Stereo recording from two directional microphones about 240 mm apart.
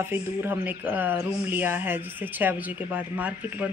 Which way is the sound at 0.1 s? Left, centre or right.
Centre.